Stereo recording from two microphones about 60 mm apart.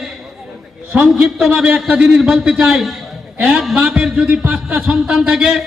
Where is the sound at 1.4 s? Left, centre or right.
Centre.